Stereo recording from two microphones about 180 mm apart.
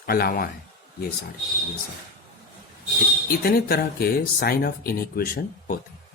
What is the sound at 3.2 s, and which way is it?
Speech, 55° left (ahead or behind).